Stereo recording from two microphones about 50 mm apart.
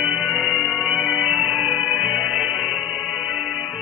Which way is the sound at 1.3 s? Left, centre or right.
Centre.